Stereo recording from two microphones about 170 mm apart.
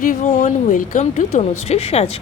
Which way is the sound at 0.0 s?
45° left (ahead or behind).